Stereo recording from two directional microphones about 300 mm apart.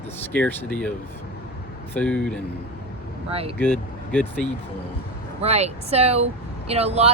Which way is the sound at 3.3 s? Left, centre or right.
Centre.